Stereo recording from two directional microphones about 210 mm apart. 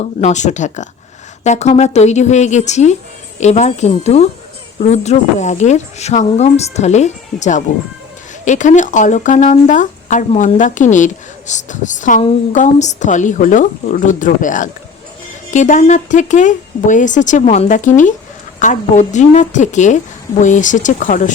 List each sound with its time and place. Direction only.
0.0 s speech: 35° left (ahead or behind)